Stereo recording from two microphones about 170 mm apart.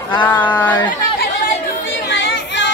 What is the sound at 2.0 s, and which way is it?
Chatter, 90° left.